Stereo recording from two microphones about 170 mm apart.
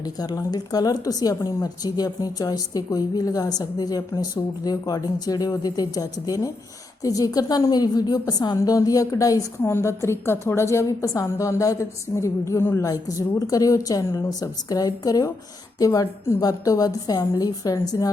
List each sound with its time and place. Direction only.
0.0 s a woman's voice: 20° left (ahead or behind)